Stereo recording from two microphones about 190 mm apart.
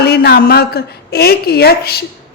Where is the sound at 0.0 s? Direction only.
55° left (ahead or behind).